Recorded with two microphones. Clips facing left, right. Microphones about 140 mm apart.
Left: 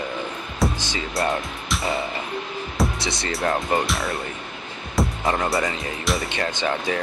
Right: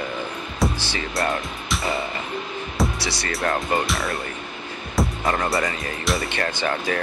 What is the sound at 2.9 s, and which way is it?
Speech, 25° left (ahead or behind).